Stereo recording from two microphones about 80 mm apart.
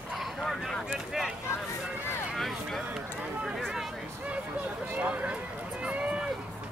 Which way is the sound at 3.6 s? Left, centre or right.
Centre.